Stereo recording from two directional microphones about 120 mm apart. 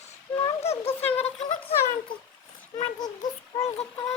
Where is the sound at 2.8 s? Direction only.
35° left (ahead or behind).